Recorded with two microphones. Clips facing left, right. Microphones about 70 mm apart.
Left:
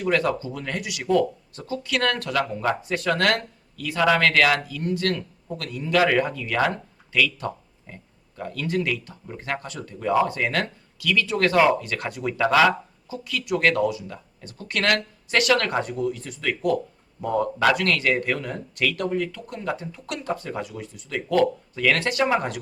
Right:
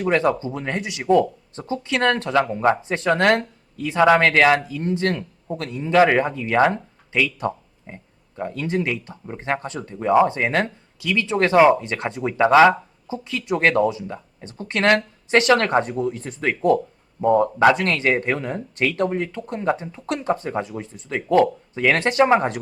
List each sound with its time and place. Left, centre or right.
0.0 s speech: right